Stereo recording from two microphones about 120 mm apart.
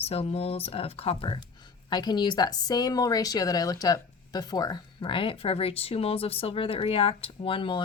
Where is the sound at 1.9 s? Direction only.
35° left (ahead or behind).